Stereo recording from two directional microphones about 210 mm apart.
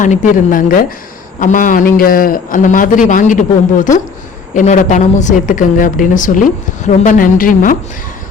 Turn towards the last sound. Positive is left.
turn(degrees=40)  # may be behind; listen again after turning